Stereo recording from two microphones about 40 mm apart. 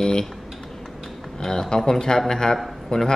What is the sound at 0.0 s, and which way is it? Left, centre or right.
Speech, centre.